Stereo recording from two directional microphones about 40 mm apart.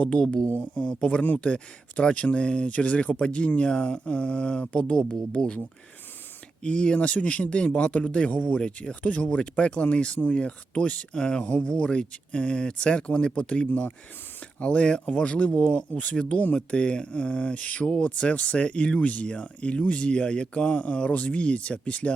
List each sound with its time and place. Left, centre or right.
0.0 s speech: left
0.5 s speech: left
0.9 s speech: left
6.6 s speech: left
8.5 s speech: left
9.0 s speech: left
11.1 s speech: left
11.4 s speech: left
11.7 s speech: left
16.2 s speech: centre
18.9 s speech: left
19.3 s speech: left